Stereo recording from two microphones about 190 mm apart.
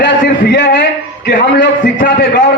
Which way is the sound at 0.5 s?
65° left (ahead or behind).